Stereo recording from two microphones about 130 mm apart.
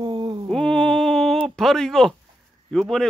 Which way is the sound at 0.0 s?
35° right (ahead or behind).